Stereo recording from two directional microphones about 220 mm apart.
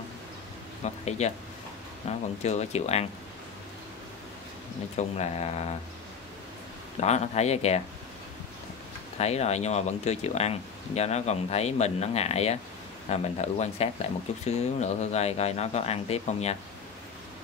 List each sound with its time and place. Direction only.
0.8 s speech: 30° left (ahead or behind)
4.9 s speech: 30° left (ahead or behind)
7.0 s speech: 30° left (ahead or behind)
9.2 s speech: 30° left (ahead or behind)